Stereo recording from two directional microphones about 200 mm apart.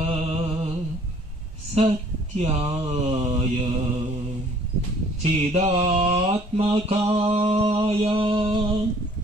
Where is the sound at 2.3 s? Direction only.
30° right (ahead or behind).